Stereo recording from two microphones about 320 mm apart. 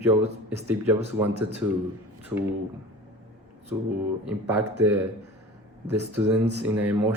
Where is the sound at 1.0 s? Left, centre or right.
Centre.